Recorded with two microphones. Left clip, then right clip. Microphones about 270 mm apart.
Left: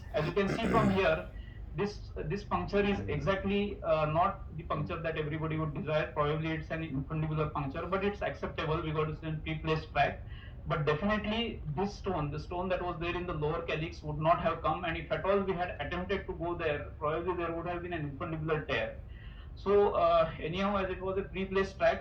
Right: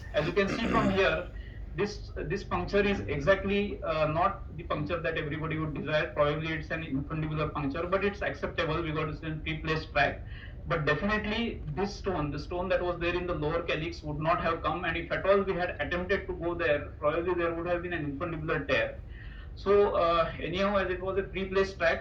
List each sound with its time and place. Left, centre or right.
0.5 s speech: left
2.3 s a woman's voice: left